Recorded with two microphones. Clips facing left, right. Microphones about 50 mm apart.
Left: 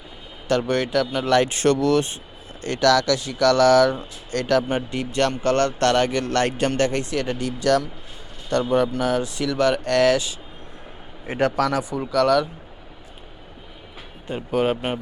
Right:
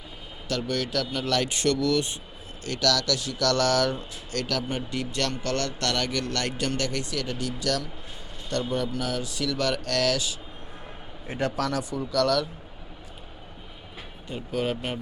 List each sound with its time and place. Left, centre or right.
0.4 s speech: left
11.6 s speech: centre
14.3 s speech: left